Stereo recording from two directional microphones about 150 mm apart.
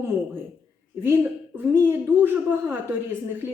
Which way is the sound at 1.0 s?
15° right (ahead or behind).